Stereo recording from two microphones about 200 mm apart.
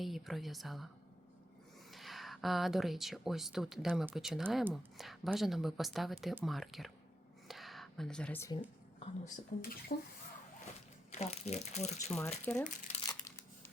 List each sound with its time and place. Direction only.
0.0 s speech: centre (ahead or behind)
1.9 s speech: centre (ahead or behind)
7.4 s a sound: centre (ahead or behind)
9.0 s speech: 40° left (ahead or behind)
9.9 s speech: 50° left (ahead or behind)
11.1 s speech: 35° left (ahead or behind)
12.5 s speech: 5° left (ahead or behind)
13.1 s a sound: 15° left (ahead or behind)